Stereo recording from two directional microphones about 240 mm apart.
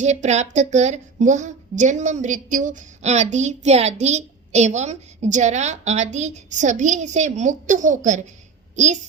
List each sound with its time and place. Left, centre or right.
0.0 s a woman's voice: right